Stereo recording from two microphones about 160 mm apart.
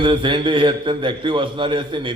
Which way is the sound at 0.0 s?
30° right (ahead or behind).